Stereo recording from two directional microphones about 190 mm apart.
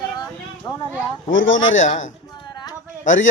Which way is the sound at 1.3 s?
90° left.